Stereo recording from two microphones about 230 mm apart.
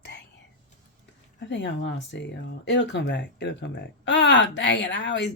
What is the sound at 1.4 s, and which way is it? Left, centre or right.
Speech, left.